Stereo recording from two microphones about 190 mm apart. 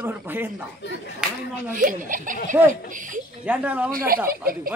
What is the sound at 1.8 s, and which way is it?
Speech, 45° right (ahead or behind).